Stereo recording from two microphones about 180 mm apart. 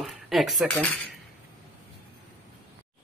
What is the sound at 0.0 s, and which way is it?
Speech, centre (ahead or behind).